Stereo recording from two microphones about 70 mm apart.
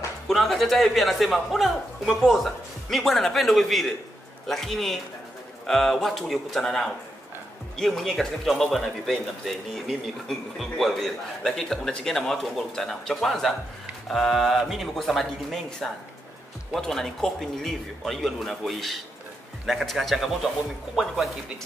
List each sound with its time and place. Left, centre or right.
0.3 s a man's voice: centre